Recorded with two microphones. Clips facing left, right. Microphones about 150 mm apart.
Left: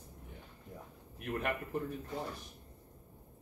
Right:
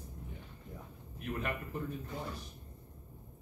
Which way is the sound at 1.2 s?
60° left (ahead or behind).